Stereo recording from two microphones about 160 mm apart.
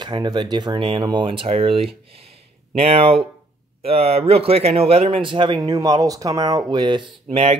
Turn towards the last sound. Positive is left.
turn(degrees=-35)  # may be behind; listen again after turning